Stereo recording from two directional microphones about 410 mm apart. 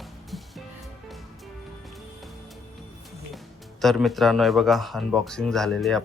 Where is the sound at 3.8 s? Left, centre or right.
Centre.